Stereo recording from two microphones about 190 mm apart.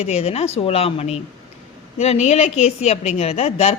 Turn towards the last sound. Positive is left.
turn(degrees=35)  # may be behind; listen again after turning